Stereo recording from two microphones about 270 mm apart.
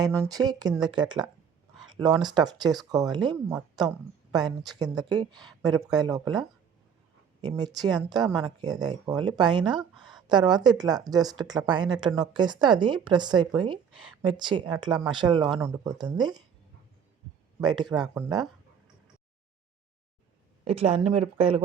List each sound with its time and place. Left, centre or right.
0.3 s speech: centre
7.4 s speech: centre
17.6 s speech: centre
20.7 s speech: right